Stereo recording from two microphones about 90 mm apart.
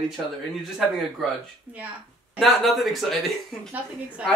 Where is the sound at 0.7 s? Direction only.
Centre (ahead or behind).